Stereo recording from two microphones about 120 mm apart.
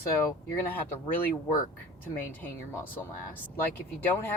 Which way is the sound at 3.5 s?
15° left (ahead or behind).